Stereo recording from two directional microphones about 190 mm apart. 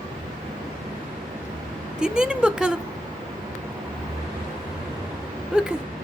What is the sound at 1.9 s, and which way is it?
Speech, 5° right (ahead or behind).